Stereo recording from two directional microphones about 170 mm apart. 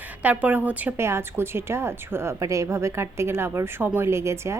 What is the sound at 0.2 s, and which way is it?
A woman's voice, 10° right (ahead or behind).